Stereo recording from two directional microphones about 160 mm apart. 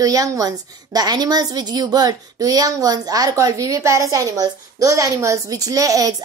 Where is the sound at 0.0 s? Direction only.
20° right (ahead or behind).